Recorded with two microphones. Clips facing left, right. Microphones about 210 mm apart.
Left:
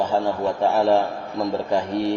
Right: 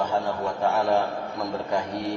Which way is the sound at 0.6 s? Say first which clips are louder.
Left 4 dB; 30° left (ahead or behind).